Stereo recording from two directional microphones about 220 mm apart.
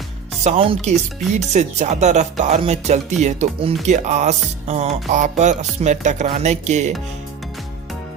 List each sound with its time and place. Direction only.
0.4 s speech: 25° right (ahead or behind)